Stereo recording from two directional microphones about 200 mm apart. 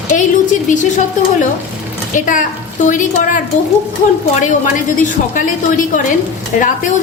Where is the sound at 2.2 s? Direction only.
40° left (ahead or behind).